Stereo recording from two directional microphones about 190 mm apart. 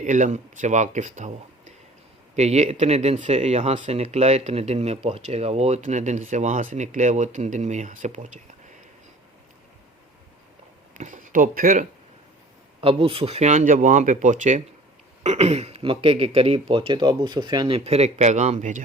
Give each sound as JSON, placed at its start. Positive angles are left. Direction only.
{"t": 0.0, "sound": "speech", "side_deg": -40}
{"t": 10.9, "sound": "speech", "side_deg": -40}
{"t": 12.8, "sound": "speech", "side_deg": -30}